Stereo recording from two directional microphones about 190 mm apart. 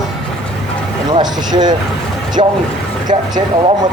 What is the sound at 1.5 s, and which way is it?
Speech, 20° right (ahead or behind).